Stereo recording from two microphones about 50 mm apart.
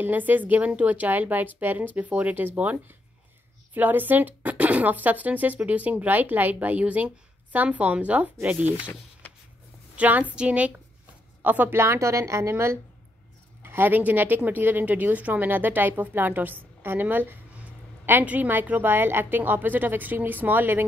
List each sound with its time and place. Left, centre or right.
0.0 s a woman's voice: right
9.9 s a woman's voice: right
11.4 s a woman's voice: right
11.7 s speech: right
13.6 s a woman's voice: right
16.8 s a sound: right
18.2 s a woman's voice: right